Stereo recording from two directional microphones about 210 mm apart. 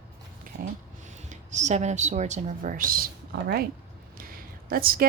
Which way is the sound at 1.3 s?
35° right (ahead or behind).